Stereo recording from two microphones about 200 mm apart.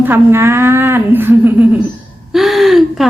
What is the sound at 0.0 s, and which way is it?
Speech, 10° right (ahead or behind).